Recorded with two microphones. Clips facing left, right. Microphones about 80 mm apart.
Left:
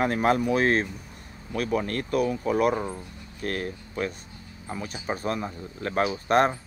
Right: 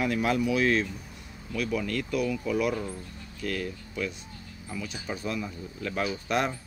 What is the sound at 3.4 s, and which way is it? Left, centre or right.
Speech, left.